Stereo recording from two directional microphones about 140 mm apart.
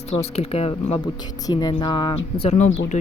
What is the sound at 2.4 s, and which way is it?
Speech, 50° left (ahead or behind).